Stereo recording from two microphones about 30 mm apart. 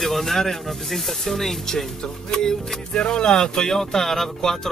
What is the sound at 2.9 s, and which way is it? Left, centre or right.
Speech, left.